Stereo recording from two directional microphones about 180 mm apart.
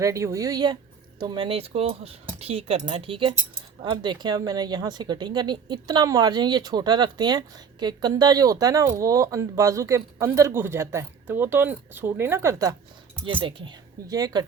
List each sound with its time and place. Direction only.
0.0 s speech: 20° right (ahead or behind)